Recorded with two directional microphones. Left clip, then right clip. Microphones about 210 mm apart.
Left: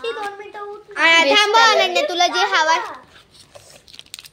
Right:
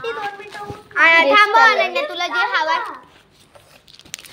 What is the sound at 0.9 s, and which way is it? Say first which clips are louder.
Child singing: right 2 dB; 20° left (ahead or behind).